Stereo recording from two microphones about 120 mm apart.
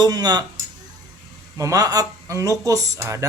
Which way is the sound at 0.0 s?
30° right (ahead or behind).